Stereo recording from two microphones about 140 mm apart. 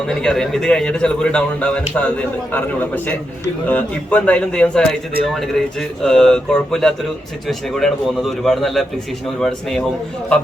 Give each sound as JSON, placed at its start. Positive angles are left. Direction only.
{"t": 0.2, "sound": "a man's voice", "side_deg": 5}